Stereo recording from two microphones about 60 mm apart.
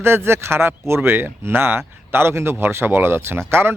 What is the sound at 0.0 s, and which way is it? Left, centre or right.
A man's voice, right.